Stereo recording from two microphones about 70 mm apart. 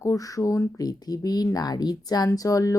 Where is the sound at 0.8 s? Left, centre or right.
Left.